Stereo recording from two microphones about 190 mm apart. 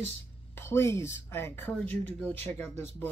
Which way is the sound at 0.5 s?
15° left (ahead or behind).